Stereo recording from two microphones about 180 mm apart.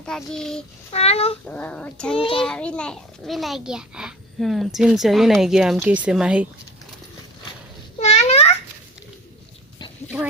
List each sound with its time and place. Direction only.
0.0 s a child's voice: 5° left (ahead or behind)
0.9 s a child's voice: 35° left (ahead or behind)
1.5 s a child's voice: 10° left (ahead or behind)
2.1 s a child's voice: 30° left (ahead or behind)
2.4 s a child's voice: 5° left (ahead or behind)
7.9 s babbling: 35° left (ahead or behind)